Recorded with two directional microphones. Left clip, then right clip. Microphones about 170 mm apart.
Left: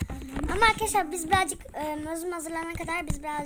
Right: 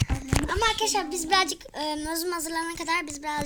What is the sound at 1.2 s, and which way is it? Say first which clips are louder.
A child's voice: right 2 dB; 5° left (ahead or behind).